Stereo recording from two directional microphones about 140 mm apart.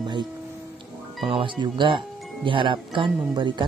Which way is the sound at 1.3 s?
35° right (ahead or behind).